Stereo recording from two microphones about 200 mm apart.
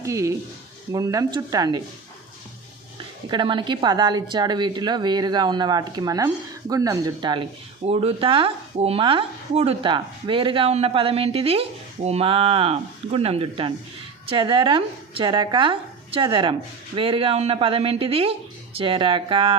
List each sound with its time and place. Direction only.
0.0 s speech: 15° right (ahead or behind)
3.2 s speech: 25° right (ahead or behind)